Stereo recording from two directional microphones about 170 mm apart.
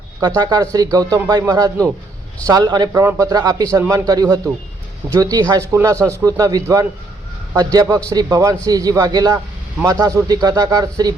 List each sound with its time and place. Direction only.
0.2 s a man's voice: 25° right (ahead or behind)